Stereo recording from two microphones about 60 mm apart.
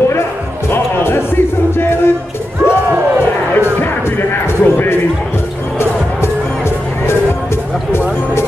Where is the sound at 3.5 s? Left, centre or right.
Left.